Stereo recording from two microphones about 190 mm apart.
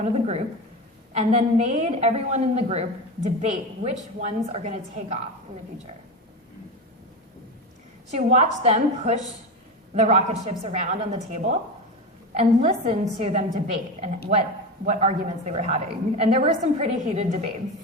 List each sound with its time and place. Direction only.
0.0 s a woman's voice: 35° right (ahead or behind)
8.1 s a woman's voice: 35° right (ahead or behind)